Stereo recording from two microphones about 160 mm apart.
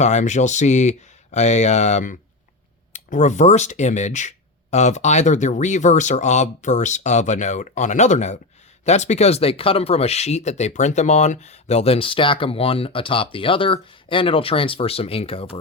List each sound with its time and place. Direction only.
0.0 s speech: 45° left (ahead or behind)